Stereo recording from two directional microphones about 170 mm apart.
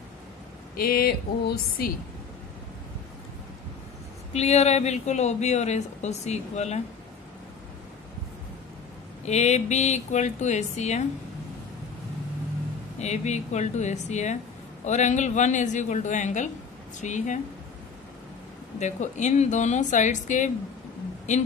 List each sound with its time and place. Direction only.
0.7 s speech: 65° left (ahead or behind)
4.3 s speech: 40° left (ahead or behind)
9.2 s speech: 40° left (ahead or behind)
13.0 s a woman's voice: 40° left (ahead or behind)
18.8 s a woman's voice: 45° left (ahead or behind)